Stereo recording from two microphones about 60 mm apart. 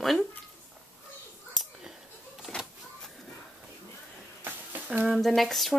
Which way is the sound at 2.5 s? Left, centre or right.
Centre.